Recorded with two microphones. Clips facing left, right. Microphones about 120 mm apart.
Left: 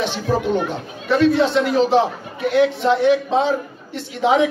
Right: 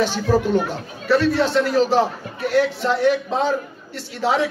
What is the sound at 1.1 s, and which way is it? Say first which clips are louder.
A man's voice: left 2 dB; 40° right (ahead or behind).